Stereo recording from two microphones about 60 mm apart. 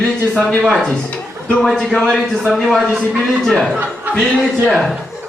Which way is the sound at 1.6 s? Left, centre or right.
Centre.